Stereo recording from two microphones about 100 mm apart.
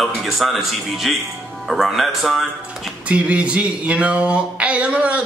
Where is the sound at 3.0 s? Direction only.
10° right (ahead or behind).